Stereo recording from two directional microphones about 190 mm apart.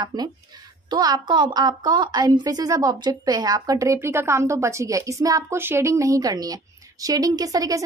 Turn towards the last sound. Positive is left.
turn(degrees=-20)  # may be behind; listen again after turning